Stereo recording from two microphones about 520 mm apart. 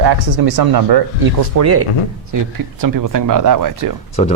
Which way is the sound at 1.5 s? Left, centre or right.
Right.